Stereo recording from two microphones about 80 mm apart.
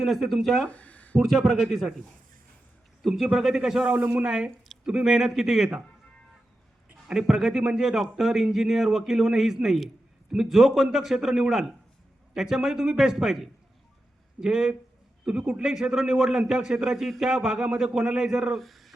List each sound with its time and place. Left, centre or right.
0.0 s a man's voice: centre
0.7 s a sound: centre
1.2 s a man's voice: centre
3.0 s a man's voice: centre
7.1 s a man's voice: centre
18.6 s a sound: centre